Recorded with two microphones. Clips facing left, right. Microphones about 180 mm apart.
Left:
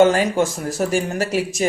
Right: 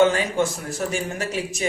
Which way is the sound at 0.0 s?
40° left (ahead or behind).